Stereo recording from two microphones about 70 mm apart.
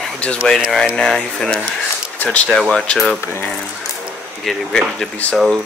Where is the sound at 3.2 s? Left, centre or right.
Left.